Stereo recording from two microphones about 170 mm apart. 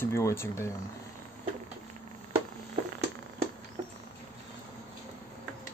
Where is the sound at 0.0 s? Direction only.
15° left (ahead or behind).